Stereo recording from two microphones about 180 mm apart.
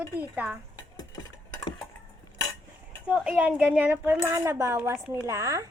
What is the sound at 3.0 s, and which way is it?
Speech, 5° right (ahead or behind).